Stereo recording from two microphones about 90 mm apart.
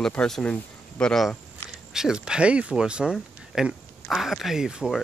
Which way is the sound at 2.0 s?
5° right (ahead or behind).